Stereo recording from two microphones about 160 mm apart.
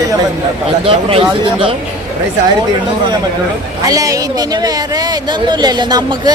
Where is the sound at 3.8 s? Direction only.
20° right (ahead or behind).